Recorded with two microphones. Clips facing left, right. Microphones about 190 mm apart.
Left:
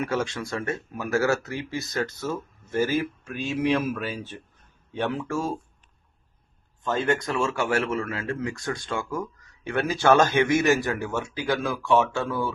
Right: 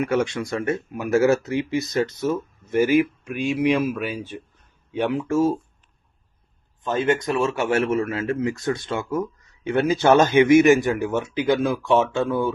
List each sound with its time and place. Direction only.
0.0 s speech: 20° right (ahead or behind)
6.8 s speech: 20° right (ahead or behind)